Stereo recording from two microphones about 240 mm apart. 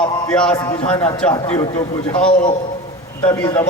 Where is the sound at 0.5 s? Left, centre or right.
Centre.